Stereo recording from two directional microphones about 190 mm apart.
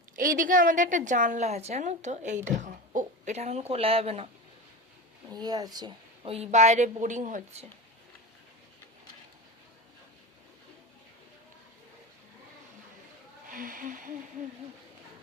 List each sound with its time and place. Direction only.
0.2 s a woman's voice: 45° right (ahead or behind)
5.3 s a woman's voice: 20° right (ahead or behind); by 7.6 s 40° right (ahead or behind)
13.5 s a sound: 45° right (ahead or behind)